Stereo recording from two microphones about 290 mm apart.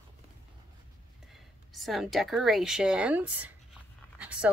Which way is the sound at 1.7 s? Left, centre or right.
Centre.